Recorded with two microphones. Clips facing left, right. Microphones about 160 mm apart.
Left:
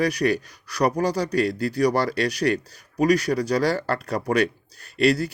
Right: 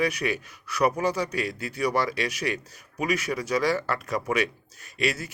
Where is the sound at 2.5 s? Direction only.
55° left (ahead or behind).